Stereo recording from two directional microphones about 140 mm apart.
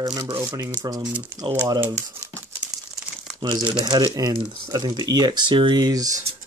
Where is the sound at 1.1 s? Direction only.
15° right (ahead or behind).